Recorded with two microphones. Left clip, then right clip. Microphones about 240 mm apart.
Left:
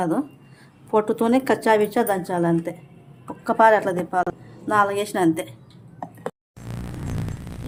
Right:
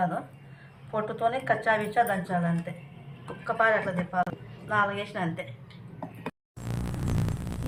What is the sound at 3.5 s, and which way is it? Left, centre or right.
A woman's voice, left.